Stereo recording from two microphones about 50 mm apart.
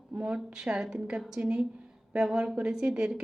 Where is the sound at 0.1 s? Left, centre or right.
Right.